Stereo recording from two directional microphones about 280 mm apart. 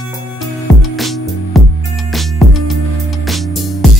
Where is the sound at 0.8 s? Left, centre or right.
Centre.